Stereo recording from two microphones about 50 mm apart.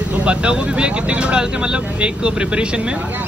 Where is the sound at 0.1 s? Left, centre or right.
Right.